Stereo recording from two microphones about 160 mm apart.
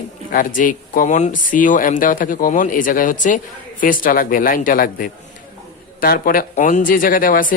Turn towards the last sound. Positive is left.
turn(degrees=60)  # may be behind; listen again after turning